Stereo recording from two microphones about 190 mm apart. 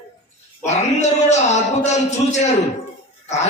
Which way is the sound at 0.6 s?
35° left (ahead or behind).